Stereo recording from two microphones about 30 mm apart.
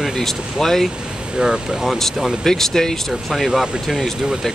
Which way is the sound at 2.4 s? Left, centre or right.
Centre.